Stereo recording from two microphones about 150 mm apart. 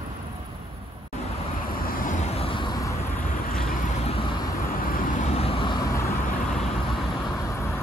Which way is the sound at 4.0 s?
40° left (ahead or behind).